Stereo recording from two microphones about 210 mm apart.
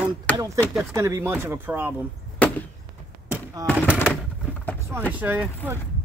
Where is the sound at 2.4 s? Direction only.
5° left (ahead or behind).